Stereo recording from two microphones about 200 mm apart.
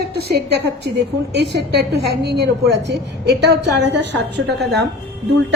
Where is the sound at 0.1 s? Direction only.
55° right (ahead or behind).